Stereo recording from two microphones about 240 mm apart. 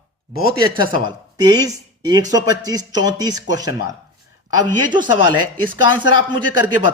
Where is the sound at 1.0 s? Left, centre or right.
Centre.